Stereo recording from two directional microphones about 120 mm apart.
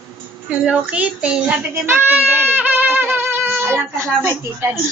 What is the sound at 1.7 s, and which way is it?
Music, 20° right (ahead or behind).